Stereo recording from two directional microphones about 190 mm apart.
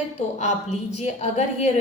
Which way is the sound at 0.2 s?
35° left (ahead or behind).